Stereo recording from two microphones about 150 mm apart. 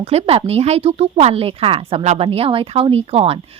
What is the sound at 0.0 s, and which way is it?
A woman's voice, 40° right (ahead or behind).